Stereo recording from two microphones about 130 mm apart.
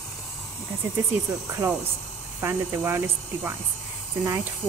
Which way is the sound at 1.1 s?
10° right (ahead or behind).